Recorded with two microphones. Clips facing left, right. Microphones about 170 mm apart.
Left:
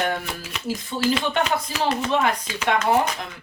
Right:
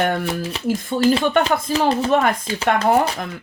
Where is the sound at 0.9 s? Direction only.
50° right (ahead or behind).